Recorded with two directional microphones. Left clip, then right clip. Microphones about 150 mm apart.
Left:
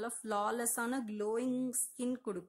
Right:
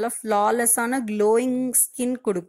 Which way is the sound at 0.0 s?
20° right (ahead or behind).